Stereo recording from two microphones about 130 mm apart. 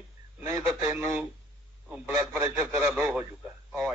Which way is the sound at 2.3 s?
15° right (ahead or behind).